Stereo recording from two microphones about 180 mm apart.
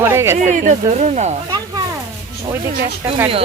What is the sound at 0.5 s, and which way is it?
Speech, 45° right (ahead or behind).